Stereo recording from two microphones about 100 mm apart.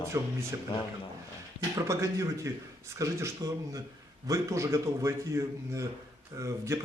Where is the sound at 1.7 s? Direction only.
30° right (ahead or behind).